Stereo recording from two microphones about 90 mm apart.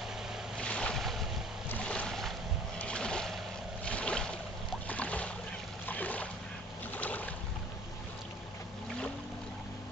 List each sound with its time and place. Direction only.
0.6 s vehicle: 10° left (ahead or behind)
1.7 s boat: 15° left (ahead or behind)